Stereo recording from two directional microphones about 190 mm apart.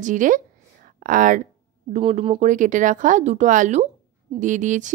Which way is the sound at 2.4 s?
40° right (ahead or behind).